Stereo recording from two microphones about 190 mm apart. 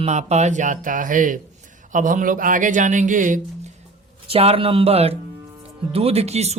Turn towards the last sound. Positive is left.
turn(degrees=-35)  # may be behind; listen again after turning